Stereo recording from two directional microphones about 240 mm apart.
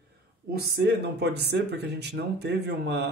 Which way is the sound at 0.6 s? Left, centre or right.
Right.